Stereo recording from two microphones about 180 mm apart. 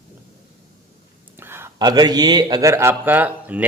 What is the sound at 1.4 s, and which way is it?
A man's voice, 15° right (ahead or behind).